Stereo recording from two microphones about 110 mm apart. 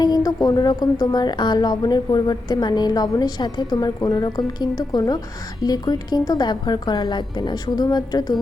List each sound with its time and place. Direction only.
0.0 s a woman's voice: 35° left (ahead or behind)